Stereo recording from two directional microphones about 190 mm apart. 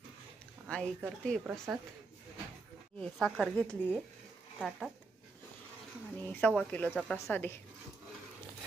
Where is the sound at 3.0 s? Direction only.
Centre (ahead or behind).